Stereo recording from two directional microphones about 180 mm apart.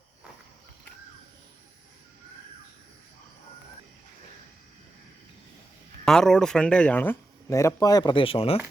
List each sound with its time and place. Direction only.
6.1 s speech: 5° left (ahead or behind); by 8.5 s 30° left (ahead or behind)